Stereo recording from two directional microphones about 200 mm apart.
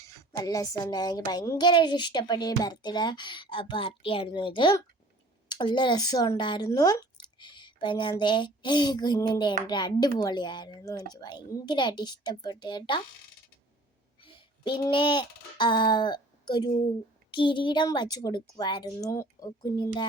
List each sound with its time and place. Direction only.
0.0 s a woman's voice: 15° left (ahead or behind)
14.2 s a sound: 25° left (ahead or behind)
17.3 s a woman's voice: 25° left (ahead or behind)